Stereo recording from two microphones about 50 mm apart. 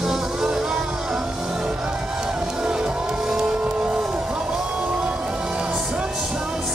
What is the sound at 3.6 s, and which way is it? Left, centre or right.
Vehicle, centre.